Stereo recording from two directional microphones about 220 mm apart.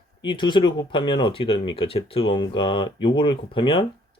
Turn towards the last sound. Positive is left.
turn(degrees=20)  # may be behind; listen again after turning